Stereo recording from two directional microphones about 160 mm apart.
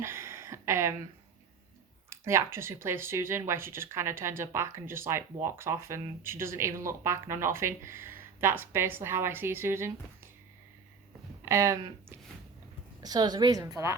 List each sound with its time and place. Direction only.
0.0 s a sound: 15° right (ahead or behind)
2.2 s speech: 15° right (ahead or behind)
11.4 s a woman's voice: 15° right (ahead or behind)